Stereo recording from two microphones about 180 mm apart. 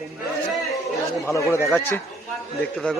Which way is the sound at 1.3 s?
15° left (ahead or behind).